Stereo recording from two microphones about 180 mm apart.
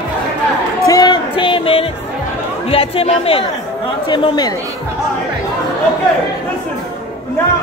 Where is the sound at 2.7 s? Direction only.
30° left (ahead or behind).